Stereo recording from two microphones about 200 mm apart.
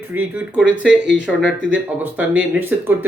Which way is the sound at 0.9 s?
60° right (ahead or behind).